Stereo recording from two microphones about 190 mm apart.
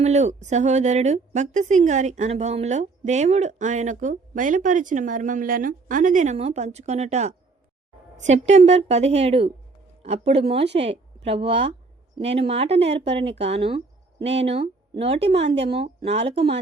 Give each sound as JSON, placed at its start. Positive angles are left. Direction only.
{"t": 0.0, "sound": "a woman's voice", "side_deg": -35}